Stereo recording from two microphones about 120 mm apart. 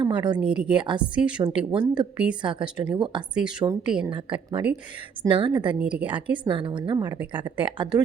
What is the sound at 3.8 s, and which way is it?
Speech, 10° right (ahead or behind).